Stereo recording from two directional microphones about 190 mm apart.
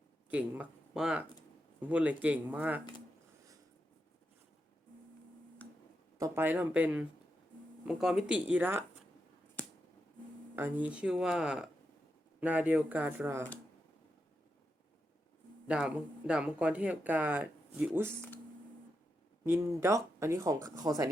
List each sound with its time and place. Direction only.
0.3 s speech: 5° right (ahead or behind)
6.1 s speech: 15° right (ahead or behind)
10.5 s speech: 10° right (ahead or behind)
15.6 s speech: 5° right (ahead or behind)
19.5 s speech: 15° right (ahead or behind)